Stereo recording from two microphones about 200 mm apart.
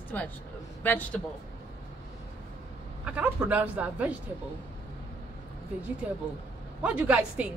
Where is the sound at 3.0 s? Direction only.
5° right (ahead or behind).